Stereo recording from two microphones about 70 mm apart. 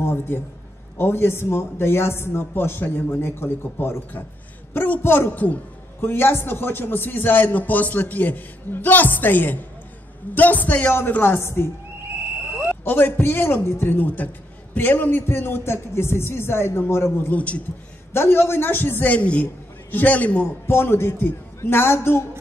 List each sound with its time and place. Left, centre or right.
0.0 s a man's voice: left
12.8 s a man's voice: left
17.3 s a man's voice: centre
18.1 s a man's voice: left
19.1 s a man's voice: centre
20.6 s a man's voice: left